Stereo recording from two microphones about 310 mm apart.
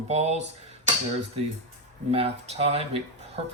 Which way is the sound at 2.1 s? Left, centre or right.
Centre.